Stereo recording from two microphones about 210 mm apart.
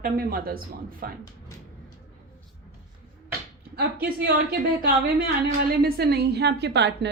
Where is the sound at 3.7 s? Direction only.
50° right (ahead or behind).